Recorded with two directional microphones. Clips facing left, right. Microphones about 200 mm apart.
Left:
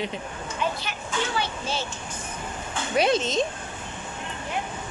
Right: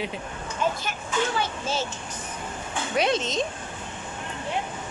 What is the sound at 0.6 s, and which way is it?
Speech, 45° right (ahead or behind).